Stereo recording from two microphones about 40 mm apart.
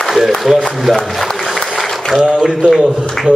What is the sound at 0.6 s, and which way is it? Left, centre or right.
Speech, centre.